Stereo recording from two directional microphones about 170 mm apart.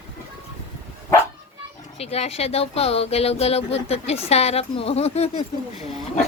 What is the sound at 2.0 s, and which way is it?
Speech, 40° left (ahead or behind).